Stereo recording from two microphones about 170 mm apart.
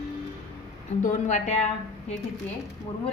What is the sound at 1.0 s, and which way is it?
Speech, 45° left (ahead or behind).